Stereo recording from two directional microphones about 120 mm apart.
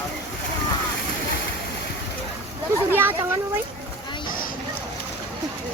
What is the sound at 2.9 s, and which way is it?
Children playing, 15° right (ahead or behind).